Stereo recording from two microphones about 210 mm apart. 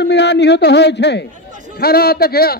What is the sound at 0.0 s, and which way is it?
A man's voice, 55° left (ahead or behind).